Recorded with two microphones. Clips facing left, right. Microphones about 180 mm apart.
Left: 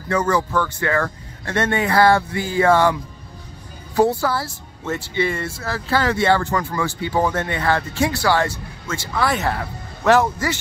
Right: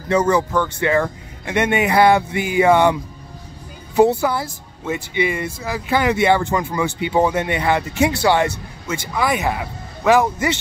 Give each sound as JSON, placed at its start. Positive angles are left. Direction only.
{"t": 0.1, "sound": "speech", "side_deg": -20}